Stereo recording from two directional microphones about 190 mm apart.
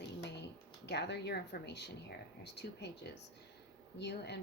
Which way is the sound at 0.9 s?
60° left (ahead or behind).